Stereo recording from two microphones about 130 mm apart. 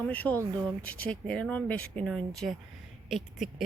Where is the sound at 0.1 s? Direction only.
10° left (ahead or behind).